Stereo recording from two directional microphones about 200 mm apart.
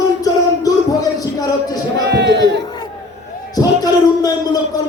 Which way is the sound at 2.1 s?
60° right (ahead or behind).